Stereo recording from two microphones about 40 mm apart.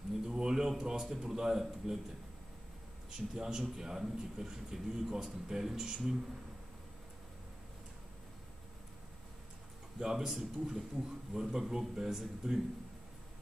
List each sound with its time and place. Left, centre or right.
0.2 s a man's voice: centre
3.1 s a man's voice: centre
9.9 s a man's voice: centre